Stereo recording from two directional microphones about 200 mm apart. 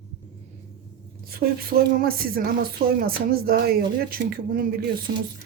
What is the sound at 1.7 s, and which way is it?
Speech, 50° right (ahead or behind).